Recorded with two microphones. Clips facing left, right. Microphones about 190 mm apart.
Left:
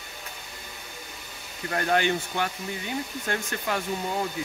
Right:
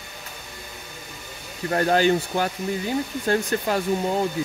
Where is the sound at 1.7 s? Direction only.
35° right (ahead or behind).